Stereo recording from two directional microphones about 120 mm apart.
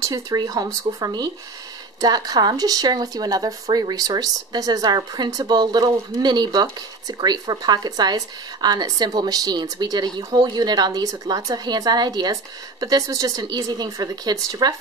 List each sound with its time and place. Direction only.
0.0 s speech: 30° right (ahead or behind)